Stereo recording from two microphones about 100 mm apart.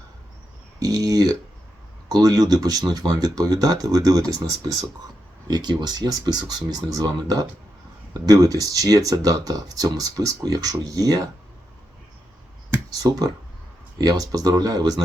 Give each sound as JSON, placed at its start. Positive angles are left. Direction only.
{"t": 0.8, "sound": "a sound", "side_deg": -40}
{"t": 2.0, "sound": "speech", "side_deg": -40}
{"t": 13.0, "sound": "speech", "side_deg": -40}